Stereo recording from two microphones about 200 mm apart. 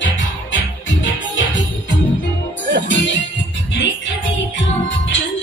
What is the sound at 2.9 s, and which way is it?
Music, 65° left (ahead or behind).